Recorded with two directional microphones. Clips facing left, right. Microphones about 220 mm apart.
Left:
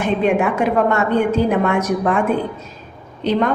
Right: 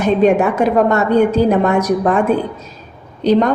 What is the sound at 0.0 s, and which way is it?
A woman's voice, 40° right (ahead or behind).